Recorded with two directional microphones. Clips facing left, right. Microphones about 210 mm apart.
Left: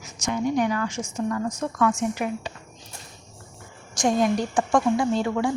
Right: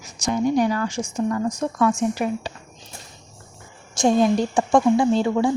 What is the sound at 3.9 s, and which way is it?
A woman's voice, 25° right (ahead or behind).